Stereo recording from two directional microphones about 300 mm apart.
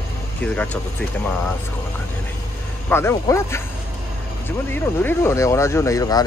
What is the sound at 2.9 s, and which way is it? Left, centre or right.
Speech, centre.